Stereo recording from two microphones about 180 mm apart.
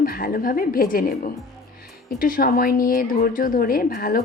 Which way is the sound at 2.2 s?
50° left (ahead or behind).